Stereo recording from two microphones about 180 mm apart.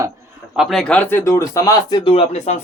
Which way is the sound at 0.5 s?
Centre (ahead or behind).